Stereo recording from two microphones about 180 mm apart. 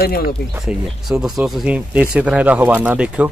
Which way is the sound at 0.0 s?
60° left (ahead or behind).